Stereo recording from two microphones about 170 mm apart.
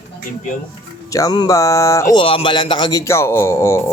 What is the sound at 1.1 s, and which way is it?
Speech, 20° left (ahead or behind).